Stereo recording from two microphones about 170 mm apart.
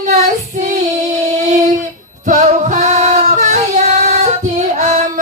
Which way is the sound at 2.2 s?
45° right (ahead or behind).